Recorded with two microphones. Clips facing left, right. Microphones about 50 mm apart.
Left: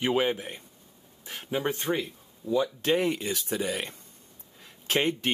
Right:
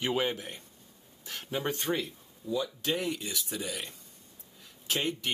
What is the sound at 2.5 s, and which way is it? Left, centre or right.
Speech, left.